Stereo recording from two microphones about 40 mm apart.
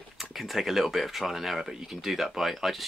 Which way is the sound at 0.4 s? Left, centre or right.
Centre.